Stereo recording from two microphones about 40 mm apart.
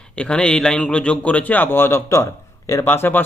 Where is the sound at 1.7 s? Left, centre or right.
Left.